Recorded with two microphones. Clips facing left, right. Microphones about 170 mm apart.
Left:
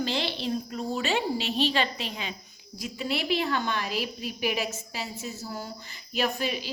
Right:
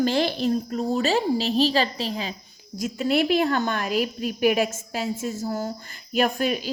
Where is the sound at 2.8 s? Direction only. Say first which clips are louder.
Right 9 dB; 50° right (ahead or behind).